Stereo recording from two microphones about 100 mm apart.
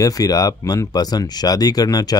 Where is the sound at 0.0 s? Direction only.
35° left (ahead or behind).